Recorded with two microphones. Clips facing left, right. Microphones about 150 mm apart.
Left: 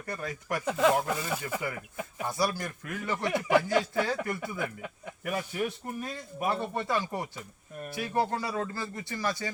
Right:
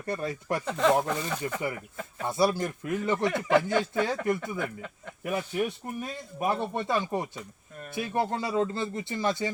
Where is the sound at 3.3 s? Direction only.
10° left (ahead or behind).